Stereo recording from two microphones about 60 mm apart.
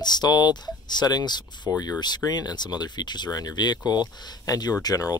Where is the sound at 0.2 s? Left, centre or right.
Left.